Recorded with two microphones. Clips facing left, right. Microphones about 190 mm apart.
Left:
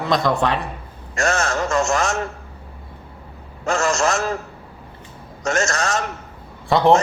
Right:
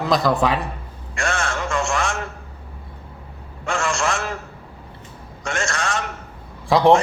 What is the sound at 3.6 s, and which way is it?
Speech, 40° left (ahead or behind).